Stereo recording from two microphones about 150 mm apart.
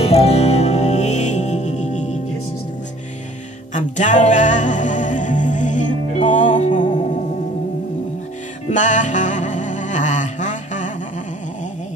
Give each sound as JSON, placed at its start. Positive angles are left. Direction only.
{"t": 0.0, "sound": "music", "side_deg": 45}
{"t": 3.7, "sound": "music", "side_deg": 55}
{"t": 8.6, "sound": "music", "side_deg": 55}